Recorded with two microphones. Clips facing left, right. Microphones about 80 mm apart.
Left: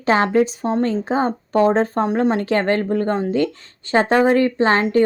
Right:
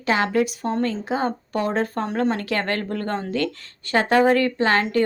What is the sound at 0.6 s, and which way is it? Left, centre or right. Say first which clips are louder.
A woman's voice: left 4 dB; left.